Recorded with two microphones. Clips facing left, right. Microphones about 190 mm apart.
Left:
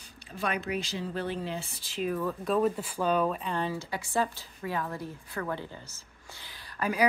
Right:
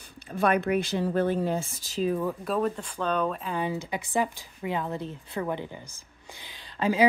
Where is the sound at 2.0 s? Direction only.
25° right (ahead or behind).